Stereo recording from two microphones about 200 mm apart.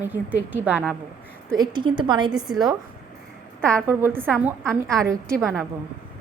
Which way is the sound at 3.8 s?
10° right (ahead or behind).